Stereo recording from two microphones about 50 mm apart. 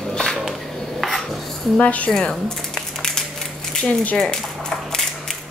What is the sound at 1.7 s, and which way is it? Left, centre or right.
Speech, left.